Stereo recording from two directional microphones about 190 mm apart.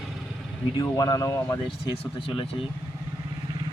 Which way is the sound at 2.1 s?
30° left (ahead or behind).